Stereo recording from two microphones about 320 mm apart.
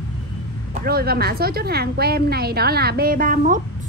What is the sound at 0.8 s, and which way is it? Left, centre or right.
A woman's voice, right.